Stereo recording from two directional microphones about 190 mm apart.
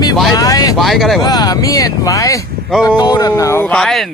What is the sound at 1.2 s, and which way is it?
A man's voice, 20° left (ahead or behind).